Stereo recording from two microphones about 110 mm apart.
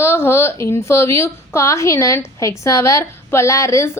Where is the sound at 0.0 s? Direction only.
20° left (ahead or behind).